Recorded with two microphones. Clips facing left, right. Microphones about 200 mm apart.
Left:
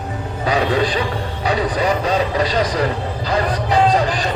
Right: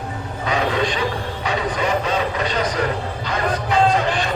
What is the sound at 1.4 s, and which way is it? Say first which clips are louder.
Vehicle: left 4 dB; 35° left (ahead or behind).